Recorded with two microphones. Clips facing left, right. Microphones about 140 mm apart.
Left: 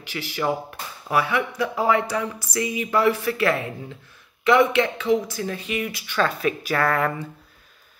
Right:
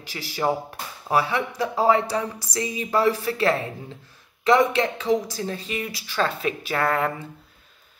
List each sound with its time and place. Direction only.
0.0 s speech: 35° right (ahead or behind)